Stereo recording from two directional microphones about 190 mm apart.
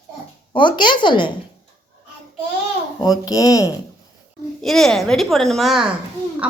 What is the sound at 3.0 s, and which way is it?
Speech, 20° left (ahead or behind).